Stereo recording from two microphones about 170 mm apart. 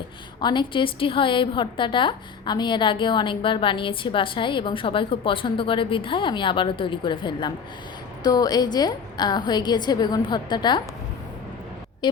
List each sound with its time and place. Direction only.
0.4 s a woman's voice: 30° left (ahead or behind)
12.0 s speech: 25° left (ahead or behind)